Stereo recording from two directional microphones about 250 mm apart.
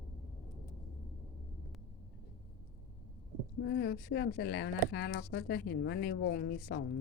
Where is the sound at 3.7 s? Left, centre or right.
Left.